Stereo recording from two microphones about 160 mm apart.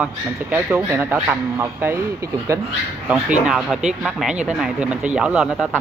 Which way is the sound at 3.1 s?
5° right (ahead or behind).